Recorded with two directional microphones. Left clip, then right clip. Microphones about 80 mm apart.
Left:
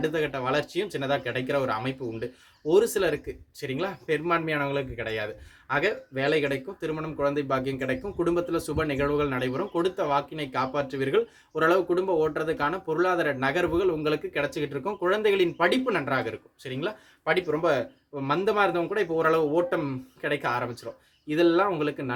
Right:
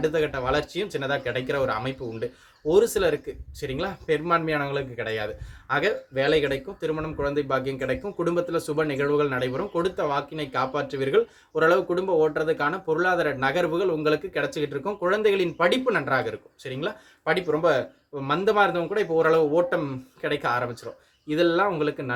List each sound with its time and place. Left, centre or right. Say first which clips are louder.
0.0 s a man's voice: right 3 dB; left